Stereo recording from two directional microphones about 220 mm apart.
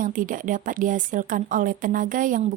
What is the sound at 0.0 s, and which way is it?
Speech, 35° right (ahead or behind).